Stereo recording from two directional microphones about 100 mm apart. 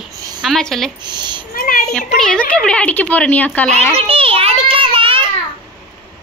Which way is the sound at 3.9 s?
70° right (ahead or behind).